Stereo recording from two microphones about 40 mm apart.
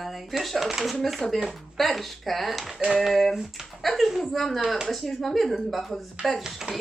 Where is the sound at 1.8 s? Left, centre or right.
Centre.